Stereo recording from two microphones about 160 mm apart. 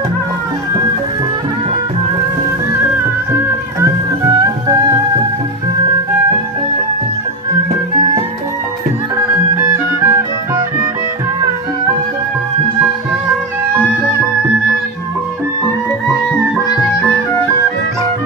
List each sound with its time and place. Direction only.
9.6 s music: 15° right (ahead or behind)